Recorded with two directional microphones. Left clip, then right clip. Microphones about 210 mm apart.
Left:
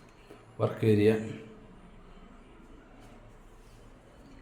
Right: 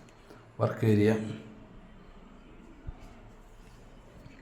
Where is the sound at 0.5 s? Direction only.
Centre (ahead or behind).